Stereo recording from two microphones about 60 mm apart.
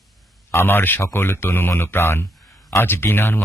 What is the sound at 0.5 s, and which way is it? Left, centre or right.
Speech, left.